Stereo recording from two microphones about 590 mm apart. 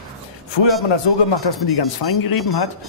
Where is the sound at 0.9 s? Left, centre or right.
Left.